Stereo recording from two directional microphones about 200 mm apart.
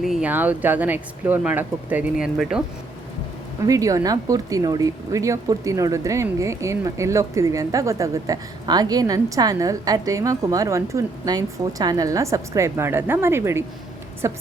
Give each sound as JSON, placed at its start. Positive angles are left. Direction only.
{"t": 0.0, "sound": "speech", "side_deg": -5}
{"t": 3.7, "sound": "speech", "side_deg": -15}